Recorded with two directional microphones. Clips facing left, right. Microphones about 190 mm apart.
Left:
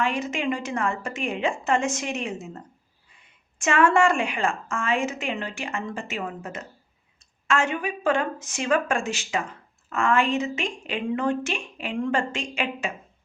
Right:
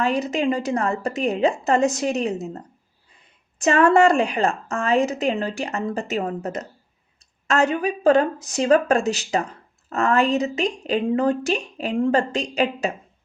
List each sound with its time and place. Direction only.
0.0 s speech: 35° right (ahead or behind)